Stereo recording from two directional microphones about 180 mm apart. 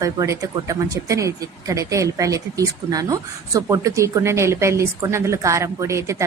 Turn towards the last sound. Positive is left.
turn(degrees=-15)  # may be behind; listen again after turning